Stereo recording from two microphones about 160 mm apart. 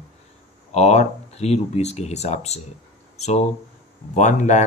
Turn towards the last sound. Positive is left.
turn(degrees=50)  # may be behind; listen again after turning